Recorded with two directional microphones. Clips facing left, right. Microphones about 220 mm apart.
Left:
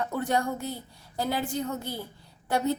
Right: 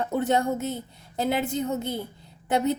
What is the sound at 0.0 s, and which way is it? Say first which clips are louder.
A woman's voice: right 4 dB; 25° right (ahead or behind).